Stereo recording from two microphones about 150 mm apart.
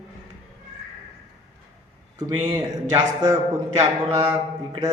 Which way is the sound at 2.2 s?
25° right (ahead or behind).